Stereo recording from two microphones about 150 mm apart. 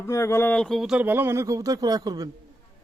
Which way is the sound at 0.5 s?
Centre (ahead or behind).